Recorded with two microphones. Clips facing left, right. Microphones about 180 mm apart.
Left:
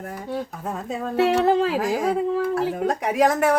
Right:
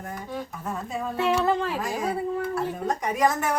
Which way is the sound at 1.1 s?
75° left (ahead or behind).